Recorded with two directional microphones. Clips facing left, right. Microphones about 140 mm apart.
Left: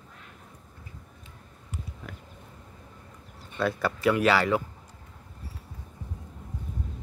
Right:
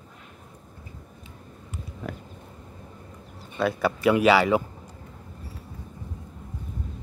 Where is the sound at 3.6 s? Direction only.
10° right (ahead or behind).